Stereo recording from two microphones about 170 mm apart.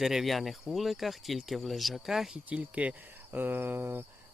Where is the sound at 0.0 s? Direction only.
Centre (ahead or behind).